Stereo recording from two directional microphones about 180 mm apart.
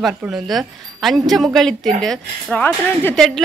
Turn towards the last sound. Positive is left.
turn(degrees=5)  # may be behind; listen again after turning